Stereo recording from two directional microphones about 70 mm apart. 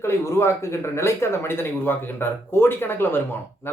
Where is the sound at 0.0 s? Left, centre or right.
Left.